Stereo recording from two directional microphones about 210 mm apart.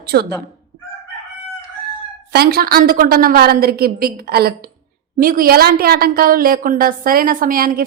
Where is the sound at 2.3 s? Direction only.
45° right (ahead or behind).